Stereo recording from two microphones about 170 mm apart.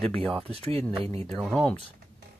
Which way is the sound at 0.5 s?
35° right (ahead or behind).